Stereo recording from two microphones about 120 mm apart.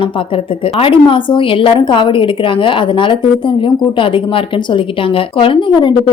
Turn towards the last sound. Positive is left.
turn(degrees=40)  # may be behind; listen again after turning